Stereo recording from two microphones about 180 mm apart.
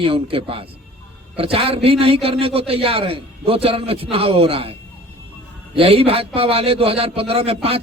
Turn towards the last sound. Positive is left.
turn(degrees=-35)  # may be behind; listen again after turning